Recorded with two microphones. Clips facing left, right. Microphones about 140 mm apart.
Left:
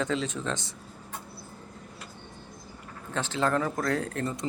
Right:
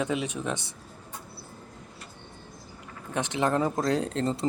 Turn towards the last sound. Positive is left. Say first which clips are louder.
# right 4 dB
turn(degrees=-25)  # may be behind; listen again after turning